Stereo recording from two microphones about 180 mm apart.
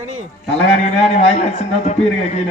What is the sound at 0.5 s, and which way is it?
A man's voice, 35° left (ahead or behind).